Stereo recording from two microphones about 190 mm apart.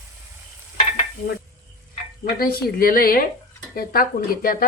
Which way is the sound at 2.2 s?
50° left (ahead or behind).